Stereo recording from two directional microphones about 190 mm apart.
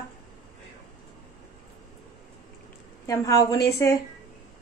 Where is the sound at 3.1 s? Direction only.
15° left (ahead or behind).